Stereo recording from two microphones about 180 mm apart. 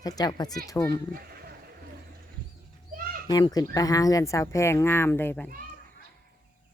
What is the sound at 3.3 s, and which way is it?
Speech, 20° left (ahead or behind).